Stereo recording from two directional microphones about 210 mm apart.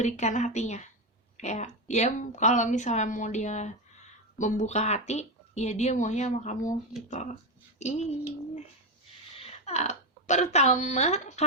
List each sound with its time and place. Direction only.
0.0 s a woman's voice: 35° left (ahead or behind)
9.4 s a woman's voice: 30° left (ahead or behind)